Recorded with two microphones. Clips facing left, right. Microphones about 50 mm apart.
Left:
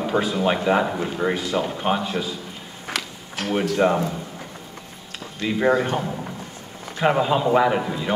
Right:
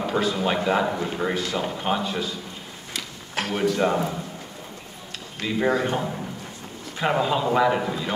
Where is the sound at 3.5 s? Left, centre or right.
Centre.